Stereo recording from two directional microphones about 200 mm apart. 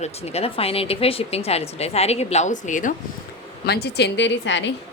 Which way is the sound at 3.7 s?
55° left (ahead or behind).